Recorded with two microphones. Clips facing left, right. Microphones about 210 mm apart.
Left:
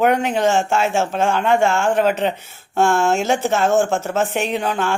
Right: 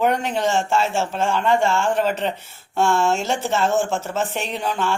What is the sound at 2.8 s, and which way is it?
Speech, 50° left (ahead or behind).